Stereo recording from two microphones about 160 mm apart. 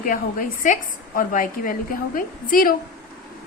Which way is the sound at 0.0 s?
60° left (ahead or behind).